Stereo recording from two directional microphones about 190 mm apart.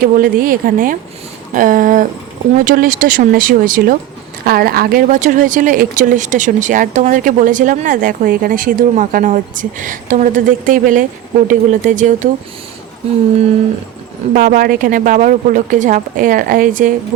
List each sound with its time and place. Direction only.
0.0 s speech: 50° right (ahead or behind)
14.3 s speech: 45° right (ahead or behind)